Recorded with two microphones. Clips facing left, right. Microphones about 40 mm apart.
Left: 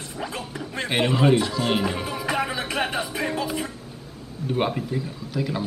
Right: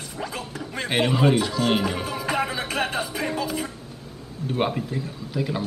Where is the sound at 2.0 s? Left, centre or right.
Centre.